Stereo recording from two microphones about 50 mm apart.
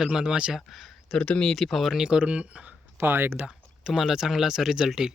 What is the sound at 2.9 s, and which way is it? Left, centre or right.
Speech, right.